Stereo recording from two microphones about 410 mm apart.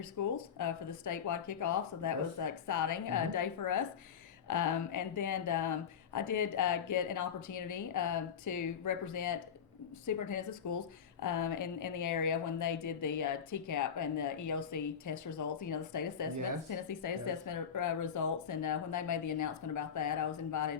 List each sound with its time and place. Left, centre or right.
0.0 s speech: left